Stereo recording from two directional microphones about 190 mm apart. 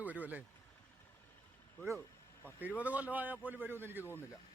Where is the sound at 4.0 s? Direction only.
10° left (ahead or behind).